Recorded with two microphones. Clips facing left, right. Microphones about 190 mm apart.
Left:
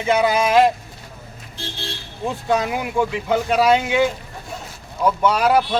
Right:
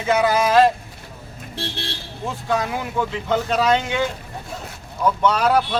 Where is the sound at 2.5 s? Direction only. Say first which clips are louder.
Left 2 dB; 15° left (ahead or behind).